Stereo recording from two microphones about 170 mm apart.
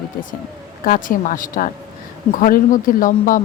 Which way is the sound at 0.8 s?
55° left (ahead or behind).